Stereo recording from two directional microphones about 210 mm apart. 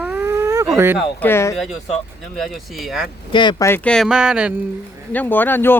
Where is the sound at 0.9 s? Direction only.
10° left (ahead or behind).